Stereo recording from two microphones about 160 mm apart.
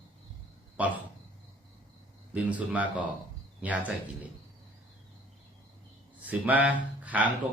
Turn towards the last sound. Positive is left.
turn(degrees=-10)  # may be behind; listen again after turning